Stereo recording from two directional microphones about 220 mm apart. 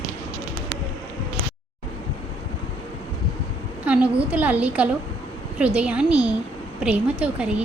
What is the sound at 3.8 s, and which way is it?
A woman's voice, 5° right (ahead or behind).